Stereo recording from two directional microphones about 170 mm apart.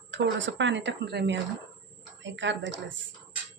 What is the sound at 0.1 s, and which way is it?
Speech, 90° right.